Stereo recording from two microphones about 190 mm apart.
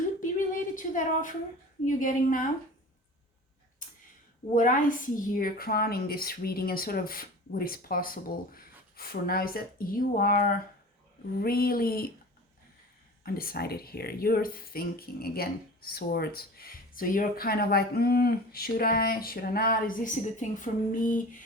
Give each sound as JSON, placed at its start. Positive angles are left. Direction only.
{"t": 0.2, "sound": "a sound", "side_deg": 45}
{"t": 1.8, "sound": "speech", "side_deg": 45}
{"t": 4.5, "sound": "speech", "side_deg": 45}
{"t": 13.2, "sound": "speech", "side_deg": 50}